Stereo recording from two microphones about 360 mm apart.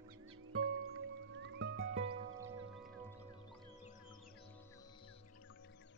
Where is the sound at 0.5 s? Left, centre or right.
Right.